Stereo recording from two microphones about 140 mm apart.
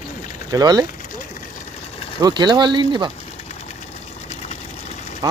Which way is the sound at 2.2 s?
30° right (ahead or behind).